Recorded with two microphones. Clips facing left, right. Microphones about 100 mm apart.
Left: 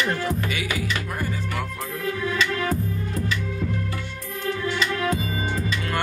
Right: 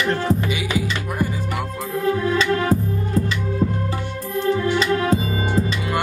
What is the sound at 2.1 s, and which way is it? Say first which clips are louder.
Music: right 6 dB; 30° right (ahead or behind).